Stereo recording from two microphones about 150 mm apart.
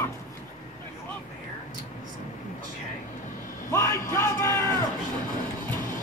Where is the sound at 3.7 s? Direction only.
20° left (ahead or behind).